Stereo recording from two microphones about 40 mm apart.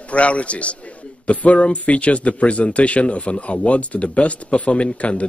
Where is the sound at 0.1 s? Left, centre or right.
Left.